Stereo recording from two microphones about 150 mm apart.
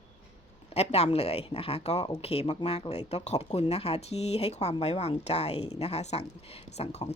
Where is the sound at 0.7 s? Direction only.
45° left (ahead or behind).